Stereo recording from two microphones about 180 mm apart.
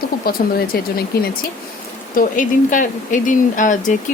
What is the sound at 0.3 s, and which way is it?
Speech, 55° left (ahead or behind).